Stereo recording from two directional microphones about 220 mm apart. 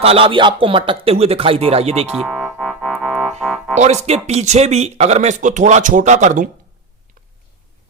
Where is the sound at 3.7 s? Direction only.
30° right (ahead or behind).